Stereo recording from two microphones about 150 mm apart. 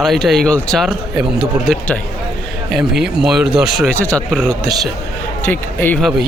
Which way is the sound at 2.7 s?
5° right (ahead or behind).